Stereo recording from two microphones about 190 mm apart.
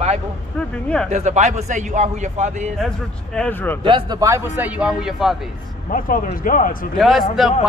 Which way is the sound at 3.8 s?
25° right (ahead or behind).